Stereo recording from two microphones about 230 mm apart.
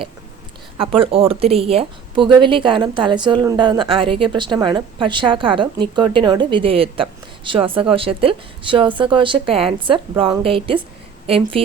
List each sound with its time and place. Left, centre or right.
0.8 s a woman's voice: right